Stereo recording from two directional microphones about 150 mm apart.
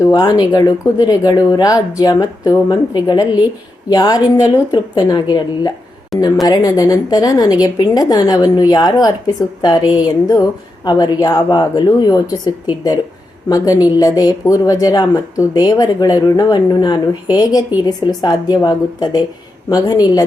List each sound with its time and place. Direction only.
0.1 s speech: 25° left (ahead or behind)